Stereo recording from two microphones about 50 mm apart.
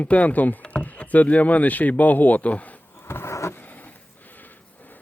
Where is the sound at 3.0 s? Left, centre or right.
Left.